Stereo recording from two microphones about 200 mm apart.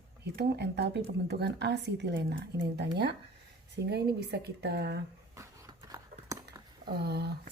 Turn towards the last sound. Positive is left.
turn(degrees=-55)  # may be behind; listen again after turning